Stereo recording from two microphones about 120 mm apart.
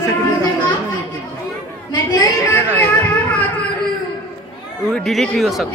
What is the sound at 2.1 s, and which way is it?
Speech, 35° left (ahead or behind).